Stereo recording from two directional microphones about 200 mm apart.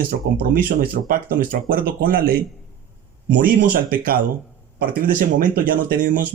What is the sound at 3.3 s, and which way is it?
Speech, 45° right (ahead or behind).